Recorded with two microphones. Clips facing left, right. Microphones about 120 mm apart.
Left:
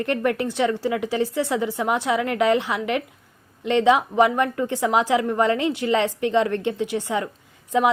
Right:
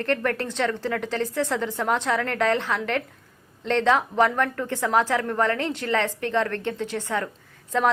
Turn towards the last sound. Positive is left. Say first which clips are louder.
# left 3 dB
turn(degrees=15)  # may be behind; listen again after turning